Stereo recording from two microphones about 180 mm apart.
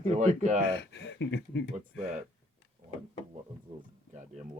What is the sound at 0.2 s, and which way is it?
Speech, 45° right (ahead or behind).